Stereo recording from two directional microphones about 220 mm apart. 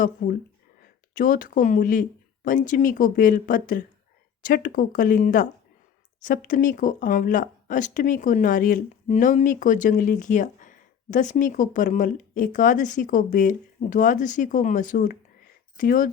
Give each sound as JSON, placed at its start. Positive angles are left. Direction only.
{"t": 0.2, "sound": "speech", "side_deg": 40}